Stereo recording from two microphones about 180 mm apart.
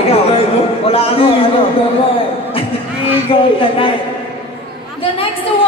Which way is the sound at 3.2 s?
30° left (ahead or behind).